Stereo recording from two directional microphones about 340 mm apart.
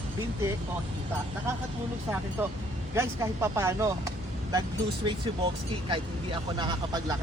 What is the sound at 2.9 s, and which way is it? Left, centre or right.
Speech, centre.